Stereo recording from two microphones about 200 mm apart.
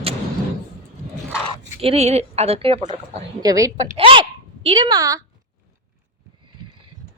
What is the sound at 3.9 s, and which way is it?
A woman's voice, 25° right (ahead or behind).